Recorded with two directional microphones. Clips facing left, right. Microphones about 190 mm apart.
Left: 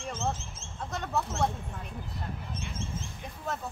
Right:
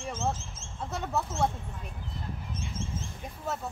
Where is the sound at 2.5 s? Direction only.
60° left (ahead or behind).